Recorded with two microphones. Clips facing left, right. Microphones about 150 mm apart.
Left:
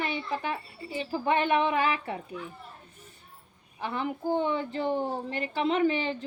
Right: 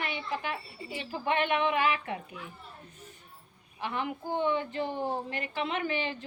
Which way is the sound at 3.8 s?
35° left (ahead or behind).